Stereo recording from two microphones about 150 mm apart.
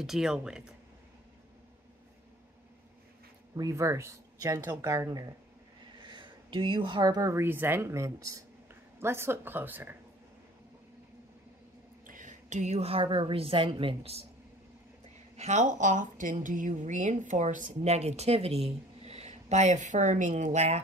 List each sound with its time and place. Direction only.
0.0 s speech: 5° right (ahead or behind)
3.5 s speech: 20° right (ahead or behind)
12.1 s a woman's voice: 60° right (ahead or behind); by 14.2 s 40° right (ahead or behind)
15.3 s a woman's voice: 50° right (ahead or behind)